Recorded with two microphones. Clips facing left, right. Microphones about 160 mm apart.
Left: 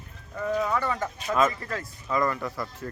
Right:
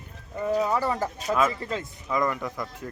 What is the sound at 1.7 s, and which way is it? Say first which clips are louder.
Speech: right 1 dB; 20° right (ahead or behind).